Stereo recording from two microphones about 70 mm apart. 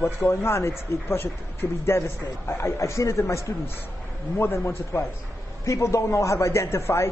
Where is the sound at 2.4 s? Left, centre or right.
Left.